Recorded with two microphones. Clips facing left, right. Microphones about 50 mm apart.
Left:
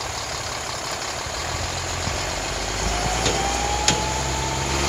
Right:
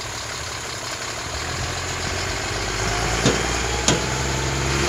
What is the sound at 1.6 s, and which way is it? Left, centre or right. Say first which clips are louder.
Vehicle: right 1 dB; centre.